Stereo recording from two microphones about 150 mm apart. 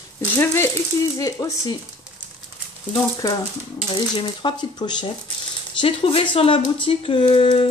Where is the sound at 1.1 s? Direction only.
20° left (ahead or behind).